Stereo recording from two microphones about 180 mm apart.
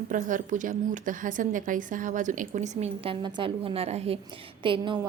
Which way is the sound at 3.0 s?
30° right (ahead or behind).